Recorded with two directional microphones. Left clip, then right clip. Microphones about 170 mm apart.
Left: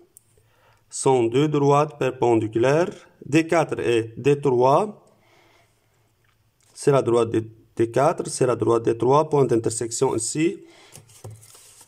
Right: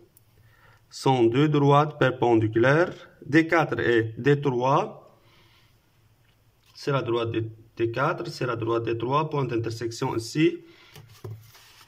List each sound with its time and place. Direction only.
0.7 s speech: 15° left (ahead or behind)
6.7 s speech: 40° left (ahead or behind)